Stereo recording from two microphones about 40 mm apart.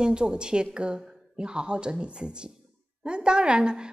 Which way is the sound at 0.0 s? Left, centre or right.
Right.